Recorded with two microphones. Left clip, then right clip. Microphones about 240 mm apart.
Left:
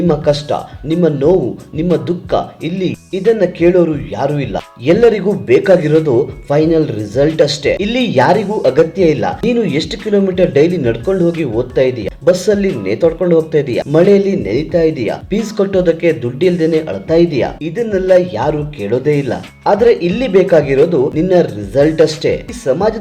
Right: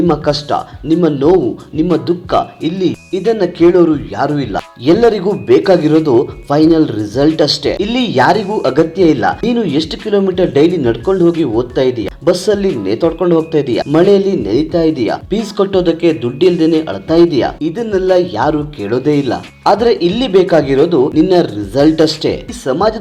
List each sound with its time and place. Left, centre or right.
0.1 s speech: centre